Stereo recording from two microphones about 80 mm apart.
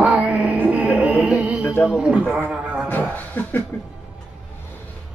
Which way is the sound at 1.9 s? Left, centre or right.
Centre.